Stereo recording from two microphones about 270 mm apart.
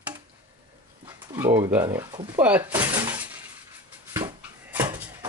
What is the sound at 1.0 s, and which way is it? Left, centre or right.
Speech, centre.